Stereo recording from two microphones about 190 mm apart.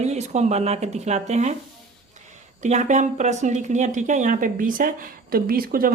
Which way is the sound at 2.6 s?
40° right (ahead or behind).